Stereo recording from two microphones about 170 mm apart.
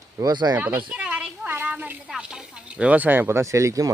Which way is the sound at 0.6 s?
10° right (ahead or behind).